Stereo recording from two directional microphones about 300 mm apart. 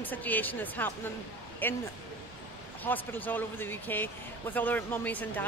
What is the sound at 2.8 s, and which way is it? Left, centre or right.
A woman's voice, centre.